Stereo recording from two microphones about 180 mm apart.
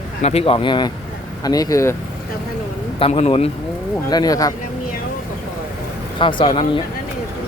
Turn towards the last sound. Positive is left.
turn(degrees=30)  # may be behind; listen again after turning